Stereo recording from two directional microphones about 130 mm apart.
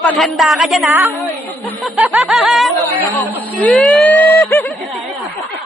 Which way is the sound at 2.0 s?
Centre (ahead or behind).